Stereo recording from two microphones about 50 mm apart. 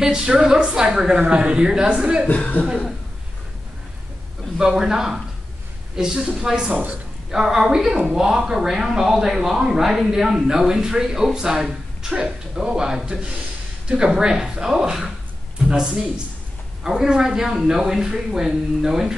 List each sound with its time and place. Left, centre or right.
0.0 s speech: centre
1.1 s a man's voice: right
2.2 s speech: left
4.6 s speech: centre
6.7 s a man's voice: right
7.2 s speech: centre